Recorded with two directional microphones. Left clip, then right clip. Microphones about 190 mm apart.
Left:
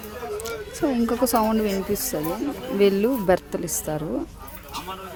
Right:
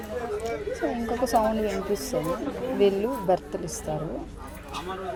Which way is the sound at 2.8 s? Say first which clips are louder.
Left 4 dB; 35° left (ahead or behind).